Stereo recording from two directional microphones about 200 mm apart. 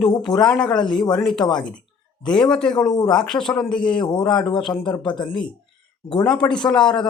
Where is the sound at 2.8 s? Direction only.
20° left (ahead or behind).